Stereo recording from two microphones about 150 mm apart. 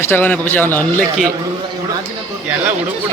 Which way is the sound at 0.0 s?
15° left (ahead or behind).